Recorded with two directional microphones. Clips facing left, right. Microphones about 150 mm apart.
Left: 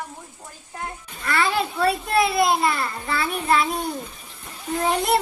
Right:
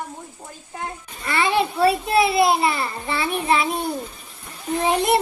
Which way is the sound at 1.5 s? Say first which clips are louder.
Right 4 dB; 25° right (ahead or behind).